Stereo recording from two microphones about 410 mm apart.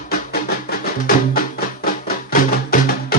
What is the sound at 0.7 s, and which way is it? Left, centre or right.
Music, left.